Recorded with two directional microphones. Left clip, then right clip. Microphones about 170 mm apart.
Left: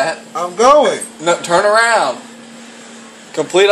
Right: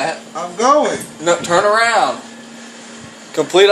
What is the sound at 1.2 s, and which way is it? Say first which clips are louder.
Speech: left 1 dB; 10° right (ahead or behind).